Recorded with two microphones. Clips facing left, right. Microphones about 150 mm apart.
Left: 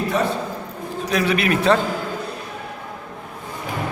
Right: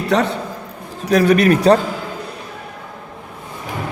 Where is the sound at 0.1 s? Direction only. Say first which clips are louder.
Right 5 dB; 75° right (ahead or behind).